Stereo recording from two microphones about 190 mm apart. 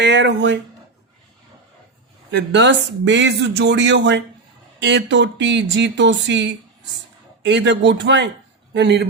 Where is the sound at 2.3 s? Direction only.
70° right (ahead or behind).